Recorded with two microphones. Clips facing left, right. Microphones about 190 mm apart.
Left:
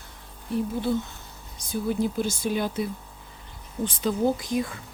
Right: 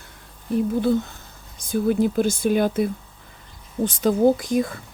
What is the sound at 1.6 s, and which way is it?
Speech, 55° right (ahead or behind).